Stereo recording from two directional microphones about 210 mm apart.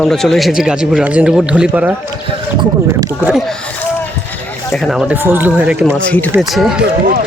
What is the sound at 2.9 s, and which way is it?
Speech, 15° right (ahead or behind).